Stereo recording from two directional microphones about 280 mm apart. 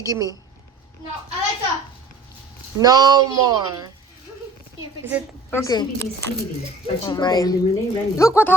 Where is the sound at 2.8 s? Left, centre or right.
Centre.